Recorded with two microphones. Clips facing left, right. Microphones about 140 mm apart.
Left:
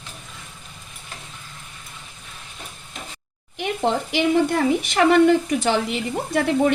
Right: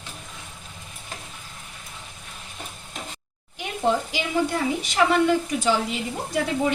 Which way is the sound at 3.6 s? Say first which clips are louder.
Left 1 dB; 65° left (ahead or behind).